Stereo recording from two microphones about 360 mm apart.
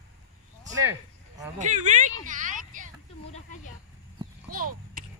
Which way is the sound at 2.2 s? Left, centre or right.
Right.